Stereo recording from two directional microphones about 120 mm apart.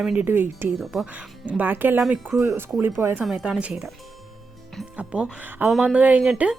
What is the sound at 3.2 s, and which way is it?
Speech, 5° right (ahead or behind).